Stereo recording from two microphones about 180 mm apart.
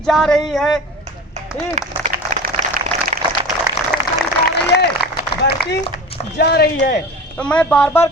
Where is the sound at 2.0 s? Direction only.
45° right (ahead or behind).